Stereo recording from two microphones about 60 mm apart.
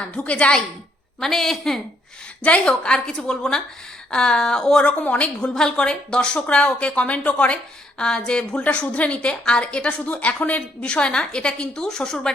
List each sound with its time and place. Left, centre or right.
0.1 s a woman's voice: left
1.2 s a woman's voice: centre
2.4 s a woman's voice: centre